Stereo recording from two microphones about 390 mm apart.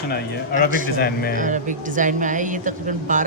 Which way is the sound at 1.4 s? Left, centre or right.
Centre.